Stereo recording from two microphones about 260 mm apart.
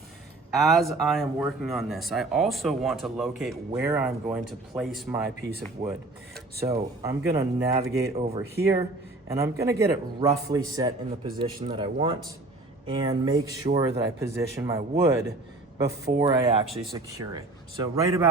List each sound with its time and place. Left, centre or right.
0.5 s speech: centre
6.6 s a man's voice: centre
8.1 s speech: right
9.3 s a man's voice: centre